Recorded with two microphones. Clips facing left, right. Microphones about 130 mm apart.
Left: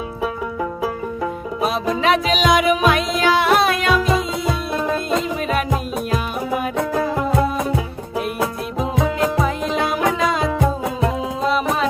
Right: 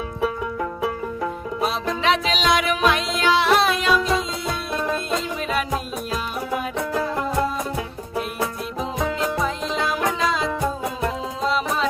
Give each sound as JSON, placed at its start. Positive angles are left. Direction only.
{"t": 2.0, "sound": "music", "side_deg": 50}
{"t": 3.9, "sound": "music", "side_deg": 0}
{"t": 6.5, "sound": "music", "side_deg": 25}
{"t": 8.8, "sound": "music", "side_deg": 0}
{"t": 9.4, "sound": "music", "side_deg": 55}
{"t": 11.4, "sound": "music", "side_deg": 50}